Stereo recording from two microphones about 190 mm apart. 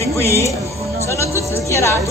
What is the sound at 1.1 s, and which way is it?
Music, 15° left (ahead or behind).